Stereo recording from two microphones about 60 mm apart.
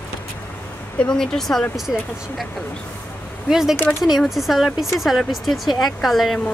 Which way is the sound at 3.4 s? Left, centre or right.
Centre.